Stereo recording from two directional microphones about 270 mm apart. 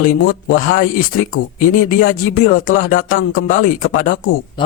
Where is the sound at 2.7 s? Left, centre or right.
Left.